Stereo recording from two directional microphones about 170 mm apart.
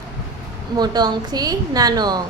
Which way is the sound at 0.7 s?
25° right (ahead or behind).